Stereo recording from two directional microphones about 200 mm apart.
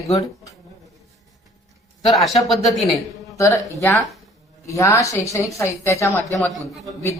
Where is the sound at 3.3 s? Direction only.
15° left (ahead or behind).